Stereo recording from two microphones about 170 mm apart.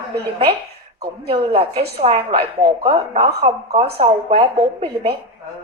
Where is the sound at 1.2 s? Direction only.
35° right (ahead or behind).